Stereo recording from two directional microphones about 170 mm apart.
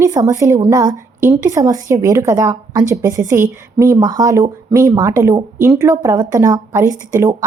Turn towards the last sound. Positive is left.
turn(degrees=-20)  # may be behind; listen again after turning